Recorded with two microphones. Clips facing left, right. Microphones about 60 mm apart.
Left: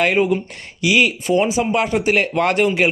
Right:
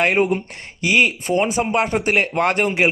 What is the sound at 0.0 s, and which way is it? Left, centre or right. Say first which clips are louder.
A man's voice: left 1 dB; right.